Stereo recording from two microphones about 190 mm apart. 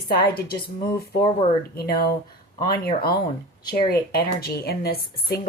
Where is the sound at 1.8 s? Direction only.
55° left (ahead or behind).